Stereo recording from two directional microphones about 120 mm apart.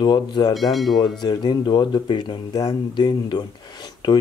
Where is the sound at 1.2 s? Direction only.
40° left (ahead or behind).